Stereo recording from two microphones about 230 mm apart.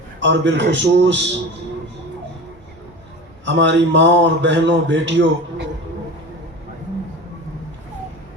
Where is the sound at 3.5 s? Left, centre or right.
Right.